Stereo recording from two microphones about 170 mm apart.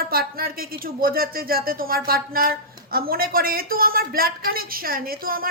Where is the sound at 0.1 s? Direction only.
60° right (ahead or behind).